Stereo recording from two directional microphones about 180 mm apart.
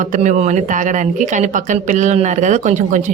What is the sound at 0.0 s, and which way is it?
Speech, 45° right (ahead or behind).